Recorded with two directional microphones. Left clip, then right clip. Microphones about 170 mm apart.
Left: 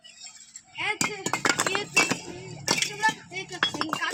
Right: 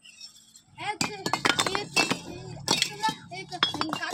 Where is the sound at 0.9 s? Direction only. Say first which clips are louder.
Left 1 dB; 20° right (ahead or behind).